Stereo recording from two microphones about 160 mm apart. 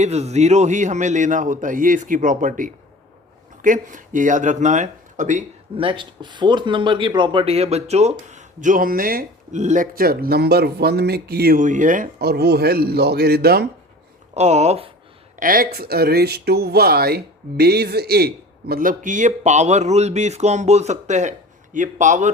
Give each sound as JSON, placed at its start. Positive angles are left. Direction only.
{"t": 0.0, "sound": "speech", "side_deg": -40}
{"t": 5.7, "sound": "speech", "side_deg": -35}
{"t": 12.2, "sound": "speech", "side_deg": -85}
{"t": 14.3, "sound": "speech", "side_deg": -45}
{"t": 15.4, "sound": "speech", "side_deg": -60}